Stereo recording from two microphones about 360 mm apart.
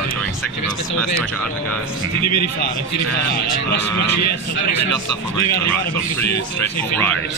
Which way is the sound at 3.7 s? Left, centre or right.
Left.